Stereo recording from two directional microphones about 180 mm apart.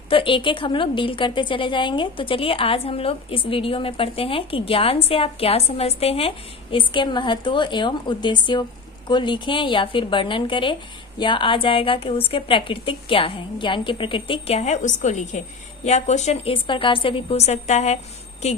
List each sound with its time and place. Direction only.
0.1 s a woman's voice: 30° left (ahead or behind)